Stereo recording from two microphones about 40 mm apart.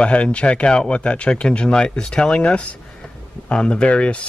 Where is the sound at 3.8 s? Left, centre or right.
Left.